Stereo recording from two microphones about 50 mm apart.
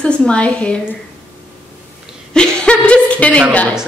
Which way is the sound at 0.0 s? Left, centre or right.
Centre.